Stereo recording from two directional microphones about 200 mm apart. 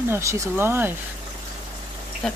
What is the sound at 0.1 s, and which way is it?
Speech, 15° right (ahead or behind).